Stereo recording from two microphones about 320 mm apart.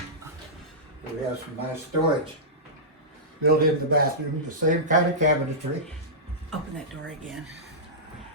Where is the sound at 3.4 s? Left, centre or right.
Right.